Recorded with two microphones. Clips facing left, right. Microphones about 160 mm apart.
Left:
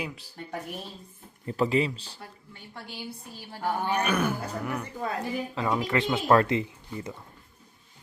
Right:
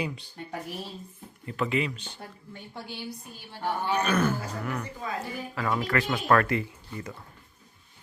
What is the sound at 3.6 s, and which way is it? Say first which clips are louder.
Speech: even; 10° left (ahead or behind).